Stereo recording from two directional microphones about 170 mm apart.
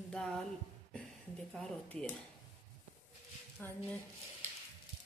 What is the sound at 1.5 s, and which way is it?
Speech, 5° left (ahead or behind).